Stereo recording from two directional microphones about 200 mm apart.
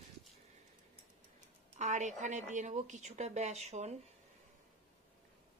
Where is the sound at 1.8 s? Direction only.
35° right (ahead or behind).